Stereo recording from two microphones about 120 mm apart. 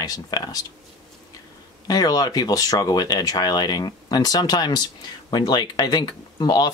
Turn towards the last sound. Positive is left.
turn(degrees=35)  # may be behind; listen again after turning